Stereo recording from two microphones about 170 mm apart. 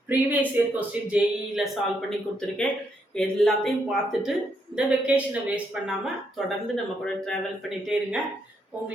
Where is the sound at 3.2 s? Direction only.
5° left (ahead or behind).